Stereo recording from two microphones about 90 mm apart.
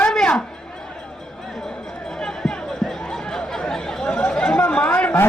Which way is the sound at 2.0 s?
5° left (ahead or behind).